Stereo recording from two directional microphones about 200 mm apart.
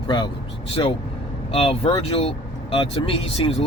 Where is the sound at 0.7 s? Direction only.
25° left (ahead or behind).